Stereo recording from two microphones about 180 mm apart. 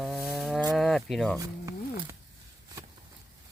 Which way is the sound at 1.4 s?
15° right (ahead or behind).